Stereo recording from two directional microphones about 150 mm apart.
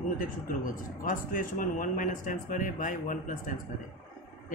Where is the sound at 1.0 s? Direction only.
65° left (ahead or behind).